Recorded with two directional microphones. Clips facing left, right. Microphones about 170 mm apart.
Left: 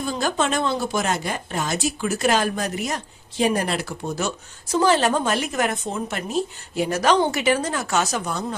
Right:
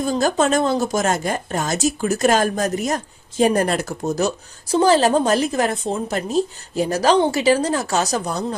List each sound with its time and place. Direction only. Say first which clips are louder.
0.0 s speech: right 5 dB; 45° right (ahead or behind)